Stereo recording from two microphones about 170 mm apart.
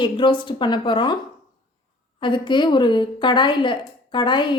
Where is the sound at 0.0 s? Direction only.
30° left (ahead or behind).